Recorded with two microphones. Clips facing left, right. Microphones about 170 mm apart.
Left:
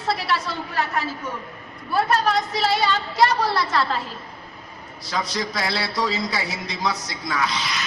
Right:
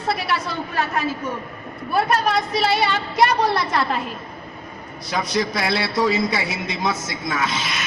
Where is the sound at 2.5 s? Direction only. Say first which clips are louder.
Right 2 dB; 20° right (ahead or behind).